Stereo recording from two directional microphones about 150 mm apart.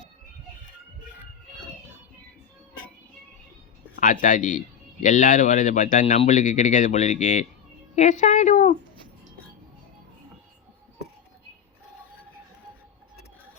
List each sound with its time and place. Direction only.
3.9 s speech: 60° left (ahead or behind)